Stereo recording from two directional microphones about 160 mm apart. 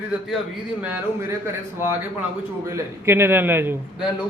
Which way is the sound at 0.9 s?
15° right (ahead or behind).